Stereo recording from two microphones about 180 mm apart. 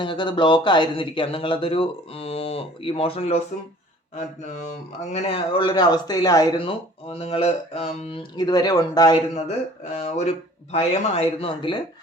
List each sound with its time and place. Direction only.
0.0 s speech: 25° left (ahead or behind)
5.1 s speech: 35° left (ahead or behind)
8.4 s speech: 20° left (ahead or behind)
10.0 s speech: 35° left (ahead or behind)